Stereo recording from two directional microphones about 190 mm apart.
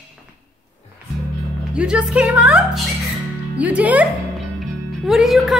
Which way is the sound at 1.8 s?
5° right (ahead or behind).